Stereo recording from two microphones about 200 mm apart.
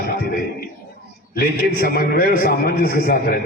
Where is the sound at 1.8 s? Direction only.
50° left (ahead or behind).